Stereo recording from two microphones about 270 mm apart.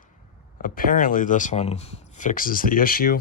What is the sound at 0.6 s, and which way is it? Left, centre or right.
Speech, left.